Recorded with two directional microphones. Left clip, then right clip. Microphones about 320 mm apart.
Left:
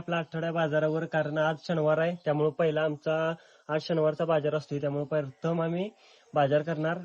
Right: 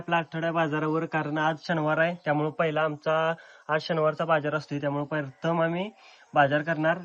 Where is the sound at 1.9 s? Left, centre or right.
Centre.